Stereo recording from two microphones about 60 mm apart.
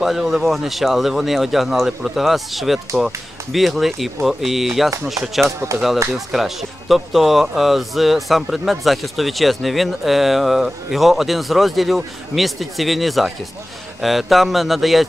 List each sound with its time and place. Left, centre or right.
0.0 s a man's voice: centre
5.7 s speech: right
6.1 s a man's voice: centre